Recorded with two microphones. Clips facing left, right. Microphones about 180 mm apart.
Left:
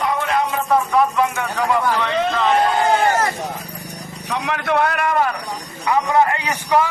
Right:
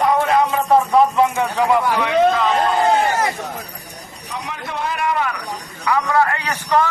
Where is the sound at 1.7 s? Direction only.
15° right (ahead or behind).